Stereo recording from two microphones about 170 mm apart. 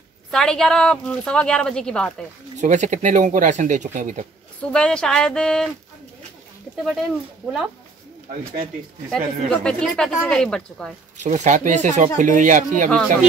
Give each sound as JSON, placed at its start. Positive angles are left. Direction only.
{"t": 0.3, "sound": "a woman's voice", "side_deg": 5}
{"t": 2.6, "sound": "speech", "side_deg": -45}
{"t": 4.6, "sound": "a woman's voice", "side_deg": 5}
{"t": 6.8, "sound": "a woman's voice", "side_deg": 0}
{"t": 9.1, "sound": "a woman's voice", "side_deg": 5}
{"t": 11.1, "sound": "speech", "side_deg": -45}